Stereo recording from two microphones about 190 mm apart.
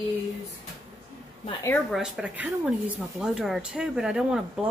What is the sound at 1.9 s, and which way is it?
Speech, centre (ahead or behind).